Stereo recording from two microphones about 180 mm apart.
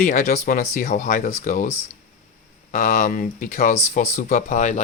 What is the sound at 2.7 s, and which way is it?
Speech, 50° left (ahead or behind).